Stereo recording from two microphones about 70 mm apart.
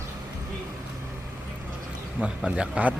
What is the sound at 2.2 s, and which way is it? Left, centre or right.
Speech, centre.